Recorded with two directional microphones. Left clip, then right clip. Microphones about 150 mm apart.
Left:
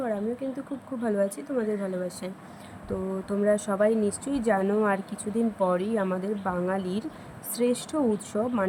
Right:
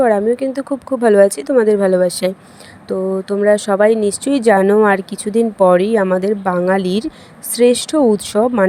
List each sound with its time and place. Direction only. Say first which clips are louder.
0.0 s speech: right 17 dB; 70° right (ahead or behind)
2.8 s speech: right 14 dB; 45° right (ahead or behind)